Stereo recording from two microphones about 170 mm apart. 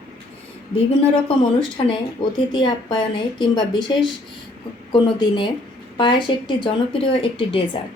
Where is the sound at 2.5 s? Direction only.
25° left (ahead or behind).